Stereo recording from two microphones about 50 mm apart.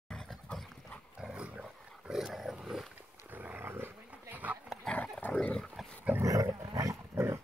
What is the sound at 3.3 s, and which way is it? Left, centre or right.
Dog, right.